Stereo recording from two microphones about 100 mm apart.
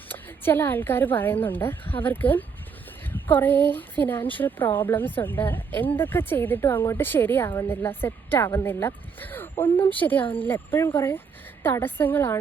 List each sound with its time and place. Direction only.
0.1 s a woman's voice: 20° left (ahead or behind)